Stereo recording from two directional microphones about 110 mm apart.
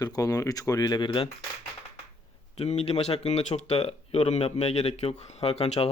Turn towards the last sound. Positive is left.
turn(degrees=70)  # may be behind; listen again after turning